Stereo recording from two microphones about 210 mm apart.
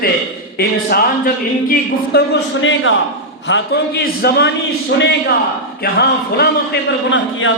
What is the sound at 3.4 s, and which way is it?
A man's voice, 55° left (ahead or behind).